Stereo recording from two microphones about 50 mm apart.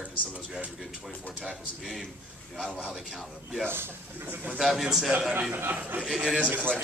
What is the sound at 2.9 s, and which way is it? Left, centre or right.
Speech, centre.